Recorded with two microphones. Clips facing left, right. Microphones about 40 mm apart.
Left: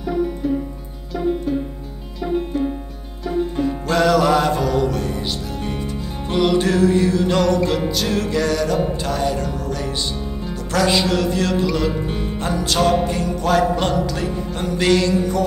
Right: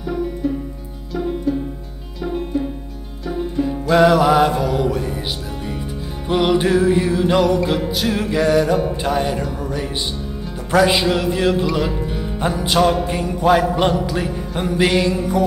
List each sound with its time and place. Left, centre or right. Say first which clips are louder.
3.9 s music: right 3 dB; centre